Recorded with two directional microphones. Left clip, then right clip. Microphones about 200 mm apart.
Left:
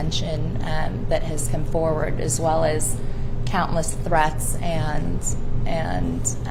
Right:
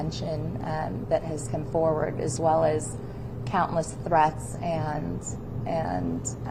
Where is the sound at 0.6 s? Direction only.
20° left (ahead or behind).